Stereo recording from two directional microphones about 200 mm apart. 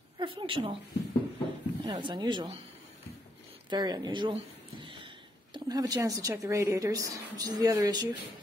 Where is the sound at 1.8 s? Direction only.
25° right (ahead or behind).